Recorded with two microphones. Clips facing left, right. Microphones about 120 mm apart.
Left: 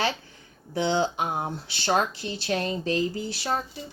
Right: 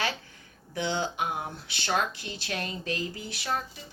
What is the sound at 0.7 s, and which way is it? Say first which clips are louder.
Speech: left 6 dB; 30° left (ahead or behind).